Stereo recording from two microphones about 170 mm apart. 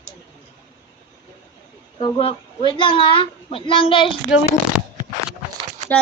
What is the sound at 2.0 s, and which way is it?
Speech, 30° left (ahead or behind).